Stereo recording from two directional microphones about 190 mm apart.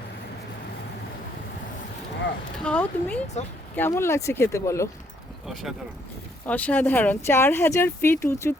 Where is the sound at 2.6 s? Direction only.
5° left (ahead or behind).